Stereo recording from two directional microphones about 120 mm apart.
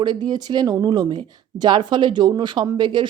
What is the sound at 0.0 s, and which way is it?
Speech, 35° right (ahead or behind).